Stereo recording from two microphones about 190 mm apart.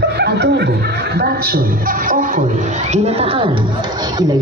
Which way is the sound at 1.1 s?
55° right (ahead or behind).